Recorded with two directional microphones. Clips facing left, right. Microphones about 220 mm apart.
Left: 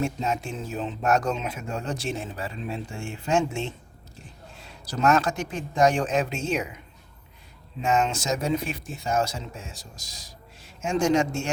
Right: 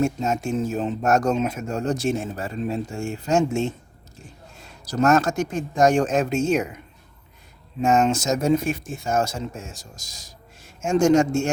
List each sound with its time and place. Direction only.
0.0 s speech: 45° right (ahead or behind)